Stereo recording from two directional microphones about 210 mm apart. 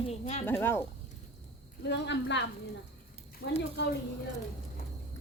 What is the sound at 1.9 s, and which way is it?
Speech, 55° left (ahead or behind).